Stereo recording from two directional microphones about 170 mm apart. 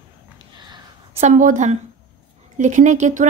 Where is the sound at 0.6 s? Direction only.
25° right (ahead or behind).